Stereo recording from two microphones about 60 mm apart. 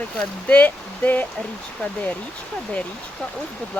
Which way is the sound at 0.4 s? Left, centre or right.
Left.